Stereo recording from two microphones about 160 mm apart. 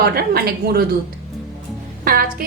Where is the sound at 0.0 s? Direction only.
75° right (ahead or behind).